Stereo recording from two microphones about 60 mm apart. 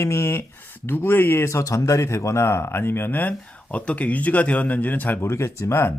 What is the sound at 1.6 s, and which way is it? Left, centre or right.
Speech, left.